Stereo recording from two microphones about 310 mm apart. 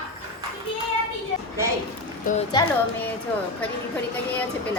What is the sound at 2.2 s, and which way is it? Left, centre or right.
Speech, left.